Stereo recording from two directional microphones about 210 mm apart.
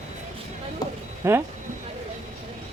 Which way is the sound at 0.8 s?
20° left (ahead or behind).